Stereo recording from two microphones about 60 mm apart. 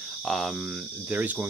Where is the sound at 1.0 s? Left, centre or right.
Right.